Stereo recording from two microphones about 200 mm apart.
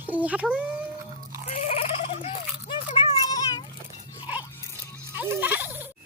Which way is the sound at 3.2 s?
20° left (ahead or behind).